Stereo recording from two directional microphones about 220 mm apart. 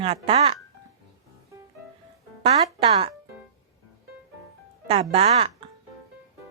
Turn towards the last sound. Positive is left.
turn(degrees=-25)  # may be behind; listen again after turning